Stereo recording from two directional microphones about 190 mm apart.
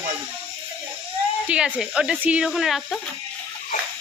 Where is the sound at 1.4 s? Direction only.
5° right (ahead or behind).